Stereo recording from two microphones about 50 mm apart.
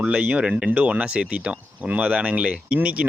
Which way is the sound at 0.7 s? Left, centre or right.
Right.